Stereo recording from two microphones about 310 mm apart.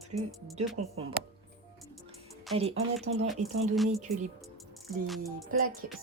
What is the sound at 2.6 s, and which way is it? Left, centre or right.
Speech, centre.